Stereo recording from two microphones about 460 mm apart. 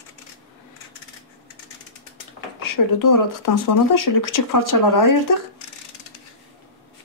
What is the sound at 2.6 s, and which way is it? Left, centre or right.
Speech, left.